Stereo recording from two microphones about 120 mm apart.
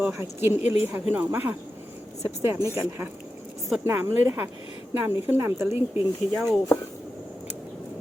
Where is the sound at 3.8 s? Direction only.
20° right (ahead or behind).